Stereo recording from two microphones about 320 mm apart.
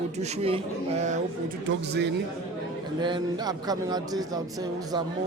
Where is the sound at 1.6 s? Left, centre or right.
Right.